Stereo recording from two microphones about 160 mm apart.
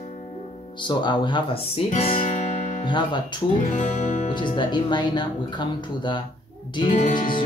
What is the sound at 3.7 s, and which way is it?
Music, 50° left (ahead or behind).